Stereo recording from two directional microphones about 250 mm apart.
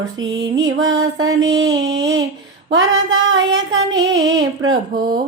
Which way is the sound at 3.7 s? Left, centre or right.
Right.